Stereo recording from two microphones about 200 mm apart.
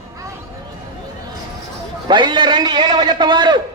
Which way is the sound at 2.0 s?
25° right (ahead or behind).